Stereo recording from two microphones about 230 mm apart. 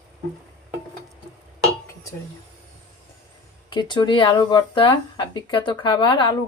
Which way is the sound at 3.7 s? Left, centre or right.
Centre.